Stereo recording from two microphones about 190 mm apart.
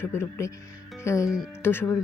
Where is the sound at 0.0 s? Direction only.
15° left (ahead or behind).